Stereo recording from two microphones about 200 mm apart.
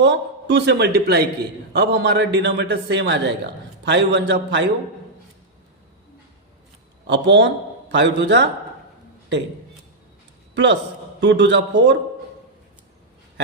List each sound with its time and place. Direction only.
0.0 s a man's voice: 60° right (ahead or behind)
7.1 s a man's voice: 60° right (ahead or behind)
10.5 s a man's voice: 60° right (ahead or behind)